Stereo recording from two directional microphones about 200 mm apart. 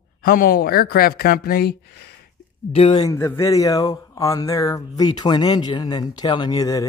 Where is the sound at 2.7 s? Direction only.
25° left (ahead or behind).